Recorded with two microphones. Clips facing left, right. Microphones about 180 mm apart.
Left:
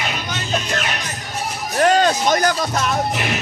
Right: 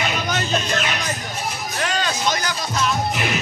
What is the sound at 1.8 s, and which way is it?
Music, 45° left (ahead or behind).